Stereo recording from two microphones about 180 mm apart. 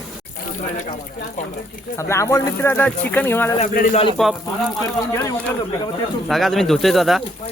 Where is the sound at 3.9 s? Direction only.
30° left (ahead or behind).